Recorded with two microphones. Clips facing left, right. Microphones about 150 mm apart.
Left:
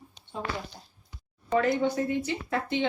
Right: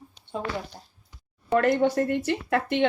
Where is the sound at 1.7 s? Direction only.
75° right (ahead or behind).